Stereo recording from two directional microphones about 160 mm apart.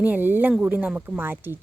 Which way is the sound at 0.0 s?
10° right (ahead or behind).